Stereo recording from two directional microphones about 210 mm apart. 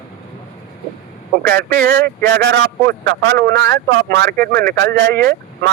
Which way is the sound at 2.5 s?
55° right (ahead or behind).